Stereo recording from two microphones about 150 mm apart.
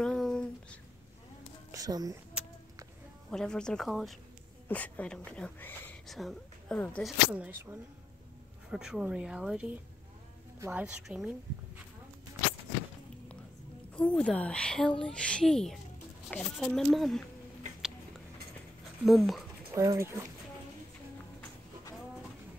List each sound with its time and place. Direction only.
0.0 s a sound: 5° left (ahead or behind)
1.7 s speech: 25° right (ahead or behind)
3.3 s a woman's voice: 5° left (ahead or behind)
6.0 s a woman's voice: centre (ahead or behind)
13.9 s a woman's voice: 5° left (ahead or behind)
19.0 s a woman's voice: centre (ahead or behind)
19.7 s speech: 20° right (ahead or behind)